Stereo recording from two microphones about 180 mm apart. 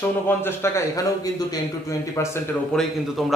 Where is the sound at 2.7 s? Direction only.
Centre (ahead or behind).